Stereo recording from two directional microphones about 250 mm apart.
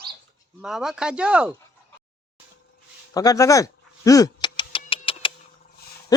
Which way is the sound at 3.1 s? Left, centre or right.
Centre.